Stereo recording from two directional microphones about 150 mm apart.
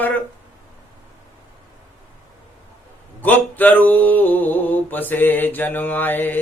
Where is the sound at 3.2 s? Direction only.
10° left (ahead or behind).